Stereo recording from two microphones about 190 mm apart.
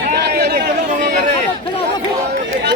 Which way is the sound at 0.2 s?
60° right (ahead or behind).